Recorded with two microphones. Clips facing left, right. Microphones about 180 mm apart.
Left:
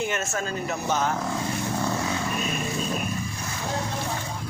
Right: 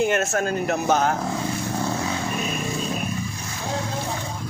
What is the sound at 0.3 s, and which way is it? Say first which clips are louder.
Speech: right 6 dB; 60° right (ahead or behind).